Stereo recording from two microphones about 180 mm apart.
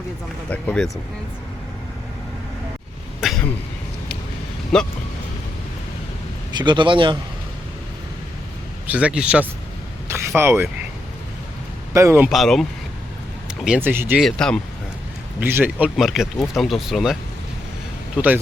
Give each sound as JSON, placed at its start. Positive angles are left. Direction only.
{"t": 0.5, "sound": "speech", "side_deg": 10}
{"t": 3.2, "sound": "a sound", "side_deg": 0}
{"t": 4.7, "sound": "speech", "side_deg": 5}
{"t": 6.5, "sound": "a man's voice", "side_deg": -25}
{"t": 8.9, "sound": "speech", "side_deg": -5}
{"t": 10.1, "sound": "a sound", "side_deg": -15}
{"t": 11.9, "sound": "speech", "side_deg": -15}
{"t": 12.3, "sound": "speech", "side_deg": 0}
{"t": 14.2, "sound": "speech", "side_deg": 5}
{"t": 15.4, "sound": "speech", "side_deg": -10}